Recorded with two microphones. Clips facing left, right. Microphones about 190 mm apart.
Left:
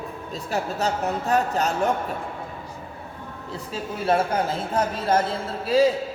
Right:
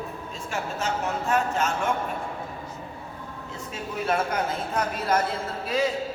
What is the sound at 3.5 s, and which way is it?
Speech, 35° left (ahead or behind).